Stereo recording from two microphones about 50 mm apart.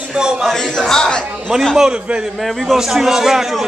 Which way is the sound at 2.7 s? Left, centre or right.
Centre.